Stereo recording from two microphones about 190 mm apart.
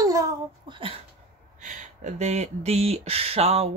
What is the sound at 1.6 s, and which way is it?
Speech, 40° right (ahead or behind).